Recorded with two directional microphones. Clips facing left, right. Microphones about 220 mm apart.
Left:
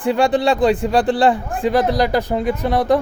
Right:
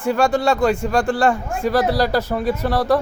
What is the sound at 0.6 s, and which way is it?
Speech, 35° left (ahead or behind).